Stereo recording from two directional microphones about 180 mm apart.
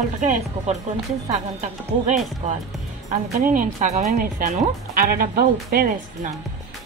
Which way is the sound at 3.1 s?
40° right (ahead or behind).